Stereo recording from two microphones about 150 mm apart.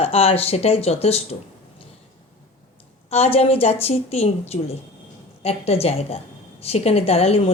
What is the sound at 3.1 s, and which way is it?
A woman's voice, 40° left (ahead or behind).